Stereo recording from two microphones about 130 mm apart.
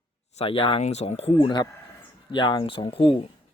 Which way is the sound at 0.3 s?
45° left (ahead or behind).